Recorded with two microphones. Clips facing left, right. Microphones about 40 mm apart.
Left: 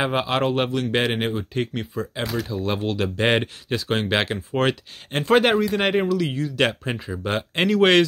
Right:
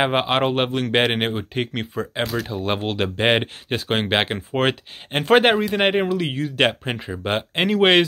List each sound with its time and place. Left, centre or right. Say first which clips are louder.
0.0 s speech: right 3 dB; right
7.5 s speech: even; right